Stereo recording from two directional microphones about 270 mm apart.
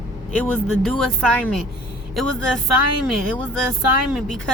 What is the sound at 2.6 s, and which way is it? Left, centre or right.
Speech, right.